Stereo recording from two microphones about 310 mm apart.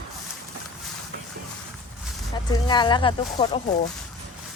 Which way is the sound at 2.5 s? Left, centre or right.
Centre.